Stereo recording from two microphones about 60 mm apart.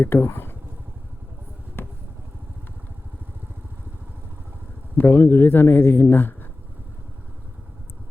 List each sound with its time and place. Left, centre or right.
0.0 s speech: left
4.9 s speech: left